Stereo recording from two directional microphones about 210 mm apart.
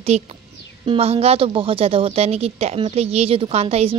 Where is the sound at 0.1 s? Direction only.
30° right (ahead or behind).